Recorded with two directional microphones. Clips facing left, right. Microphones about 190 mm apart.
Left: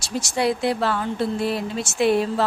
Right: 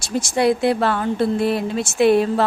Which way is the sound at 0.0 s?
55° right (ahead or behind).